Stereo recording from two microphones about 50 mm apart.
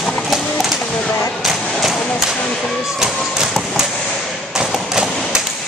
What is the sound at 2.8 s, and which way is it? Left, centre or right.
Thump, centre.